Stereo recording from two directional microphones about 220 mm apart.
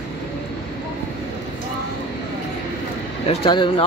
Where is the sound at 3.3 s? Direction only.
20° left (ahead or behind).